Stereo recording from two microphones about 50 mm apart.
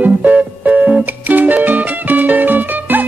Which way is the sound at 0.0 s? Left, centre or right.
Right.